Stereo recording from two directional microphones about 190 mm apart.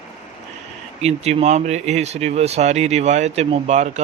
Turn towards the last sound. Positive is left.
turn(degrees=-35)  # may be behind; listen again after turning